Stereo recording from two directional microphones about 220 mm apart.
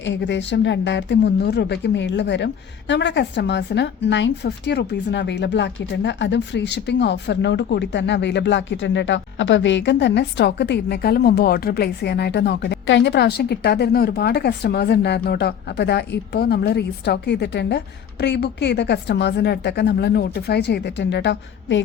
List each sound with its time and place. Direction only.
0.0 s speech: 55° left (ahead or behind)